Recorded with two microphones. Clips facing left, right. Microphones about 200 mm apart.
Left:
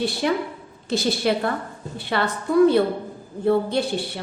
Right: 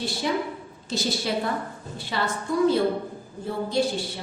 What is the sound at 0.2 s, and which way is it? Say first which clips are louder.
A woman's voice: left 3 dB; 60° left (ahead or behind).